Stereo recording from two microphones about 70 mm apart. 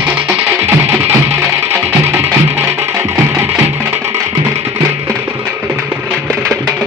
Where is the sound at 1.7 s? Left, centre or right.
Right.